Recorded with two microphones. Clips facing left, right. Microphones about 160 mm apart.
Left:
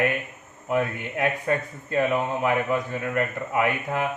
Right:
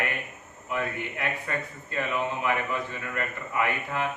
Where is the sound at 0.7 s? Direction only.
45° left (ahead or behind).